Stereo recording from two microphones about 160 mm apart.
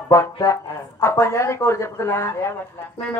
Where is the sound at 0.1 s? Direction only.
20° left (ahead or behind).